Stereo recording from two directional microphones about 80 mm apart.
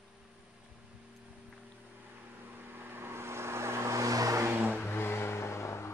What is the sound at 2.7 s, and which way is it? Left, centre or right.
Vehicle, right.